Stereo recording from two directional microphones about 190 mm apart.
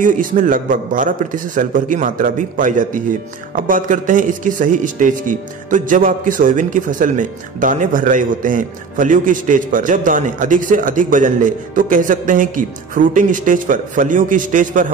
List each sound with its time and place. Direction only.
0.0 s a man's voice: 45° right (ahead or behind)